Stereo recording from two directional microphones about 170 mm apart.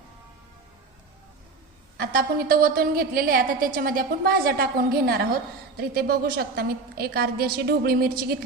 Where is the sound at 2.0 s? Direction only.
60° right (ahead or behind).